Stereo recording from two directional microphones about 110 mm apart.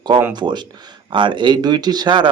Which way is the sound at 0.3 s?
40° right (ahead or behind).